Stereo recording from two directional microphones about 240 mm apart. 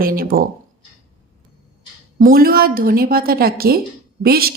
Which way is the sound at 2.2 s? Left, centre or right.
Right.